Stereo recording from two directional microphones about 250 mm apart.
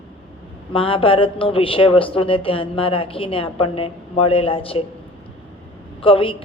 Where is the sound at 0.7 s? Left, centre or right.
Left.